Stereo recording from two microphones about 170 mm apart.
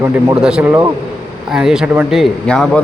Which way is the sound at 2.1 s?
5° left (ahead or behind).